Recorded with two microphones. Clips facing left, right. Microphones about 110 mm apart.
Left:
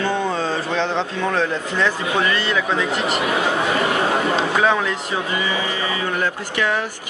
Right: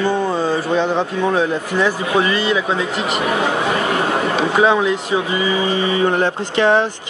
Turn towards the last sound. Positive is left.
turn(degrees=-30)  # may be behind; listen again after turning